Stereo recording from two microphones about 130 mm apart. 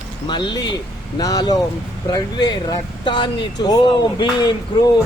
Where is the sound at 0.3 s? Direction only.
35° left (ahead or behind).